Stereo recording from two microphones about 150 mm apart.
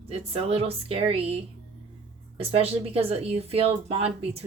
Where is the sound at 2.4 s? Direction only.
40° right (ahead or behind).